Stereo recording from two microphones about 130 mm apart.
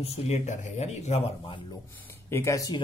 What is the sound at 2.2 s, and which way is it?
Speech, 20° left (ahead or behind).